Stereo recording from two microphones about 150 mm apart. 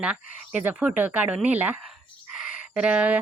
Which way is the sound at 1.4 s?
10° right (ahead or behind).